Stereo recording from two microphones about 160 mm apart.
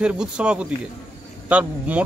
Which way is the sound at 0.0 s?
5° right (ahead or behind).